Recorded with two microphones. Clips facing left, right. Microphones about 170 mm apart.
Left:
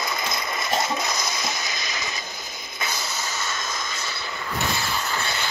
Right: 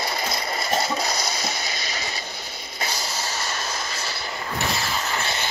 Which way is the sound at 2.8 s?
35° right (ahead or behind).